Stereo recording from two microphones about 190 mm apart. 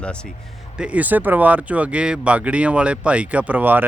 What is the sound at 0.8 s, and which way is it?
A man's voice, 5° right (ahead or behind).